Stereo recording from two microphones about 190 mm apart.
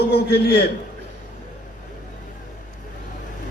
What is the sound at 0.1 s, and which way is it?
Speech, 55° left (ahead or behind).